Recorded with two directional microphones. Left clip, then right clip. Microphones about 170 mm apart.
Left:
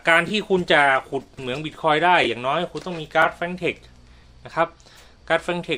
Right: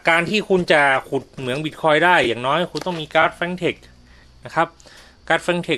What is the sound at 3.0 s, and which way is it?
A man's voice, 50° right (ahead or behind).